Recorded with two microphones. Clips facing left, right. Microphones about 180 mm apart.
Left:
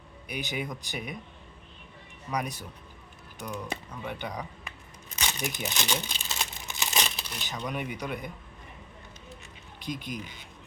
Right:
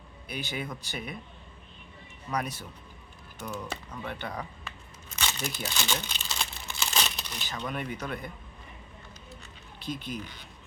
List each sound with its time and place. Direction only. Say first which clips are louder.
0.3 s speech: left 1 dB; 15° left (ahead or behind)
2.3 s speech: even; 15° left (ahead or behind)
5.1 s crumpling: left 1 dB; 15° left (ahead or behind)
7.2 s a sound: even; 5° left (ahead or behind)
7.6 s speech: left 1 dB; 10° left (ahead or behind)
9.8 s speech: even; 15° left (ahead or behind)